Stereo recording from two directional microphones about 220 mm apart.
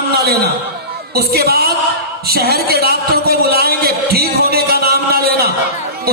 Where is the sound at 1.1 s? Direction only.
45° right (ahead or behind).